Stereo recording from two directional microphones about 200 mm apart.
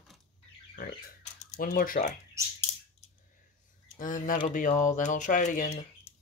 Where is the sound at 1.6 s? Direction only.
45° left (ahead or behind).